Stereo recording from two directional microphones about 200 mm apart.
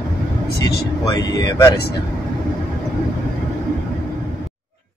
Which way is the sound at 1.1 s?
20° left (ahead or behind).